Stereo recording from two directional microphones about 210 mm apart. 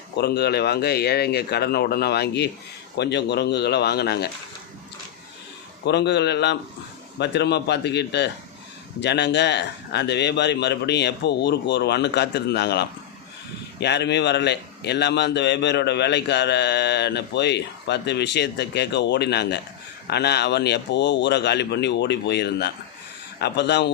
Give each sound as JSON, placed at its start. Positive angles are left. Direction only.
{"t": 0.2, "sound": "a man's voice", "side_deg": 50}
{"t": 5.8, "sound": "a man's voice", "side_deg": 55}